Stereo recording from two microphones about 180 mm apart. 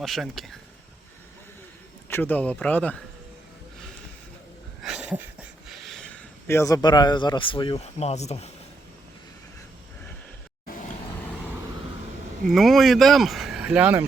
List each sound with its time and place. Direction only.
0.0 s speech: centre (ahead or behind)
2.0 s speech: 10° left (ahead or behind)
4.8 s a sound: 5° right (ahead or behind); by 8.4 s 40° left (ahead or behind)
12.5 s speech: centre (ahead or behind)